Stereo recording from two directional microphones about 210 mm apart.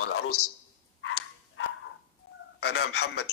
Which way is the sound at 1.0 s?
70° left (ahead or behind).